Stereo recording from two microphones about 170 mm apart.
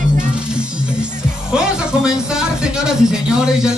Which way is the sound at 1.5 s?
5° right (ahead or behind).